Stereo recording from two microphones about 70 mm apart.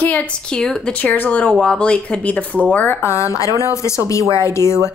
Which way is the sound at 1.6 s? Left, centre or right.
Centre.